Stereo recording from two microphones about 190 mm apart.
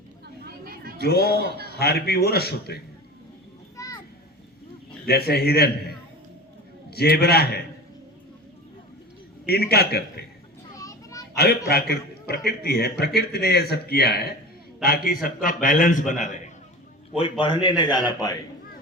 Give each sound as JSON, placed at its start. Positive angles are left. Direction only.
{"t": 0.4, "sound": "chatter", "side_deg": -55}
{"t": 0.9, "sound": "a man's voice", "side_deg": 55}
{"t": 3.8, "sound": "children playing", "side_deg": 15}
{"t": 5.0, "sound": "a man's voice", "side_deg": 55}
{"t": 6.9, "sound": "a man's voice", "side_deg": 55}
{"t": 9.5, "sound": "a man's voice", "side_deg": 55}
{"t": 10.8, "sound": "children playing", "side_deg": 15}
{"t": 11.3, "sound": "a man's voice", "side_deg": 55}
{"t": 17.2, "sound": "a man's voice", "side_deg": 25}